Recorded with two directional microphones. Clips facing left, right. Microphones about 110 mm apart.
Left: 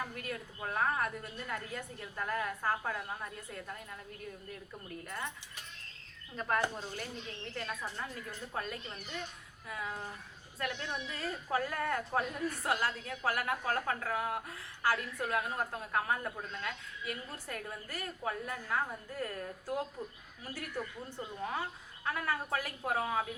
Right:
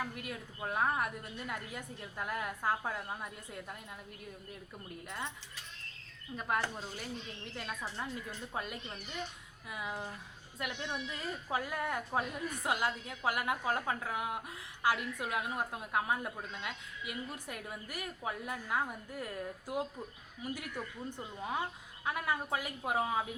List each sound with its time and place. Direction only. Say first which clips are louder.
0.2 s speech: left 1 dB; 15° right (ahead or behind)
5.0 s speech: even; 15° right (ahead or behind)
6.3 s speech: left 2 dB; 10° right (ahead or behind)